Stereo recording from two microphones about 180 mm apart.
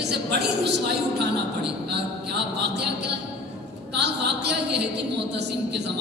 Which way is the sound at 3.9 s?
70° right (ahead or behind).